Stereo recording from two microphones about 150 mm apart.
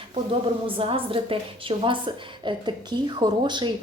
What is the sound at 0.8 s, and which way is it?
A woman's voice, 40° right (ahead or behind).